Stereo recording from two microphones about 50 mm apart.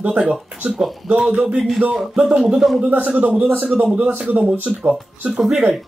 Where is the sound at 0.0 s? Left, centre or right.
Right.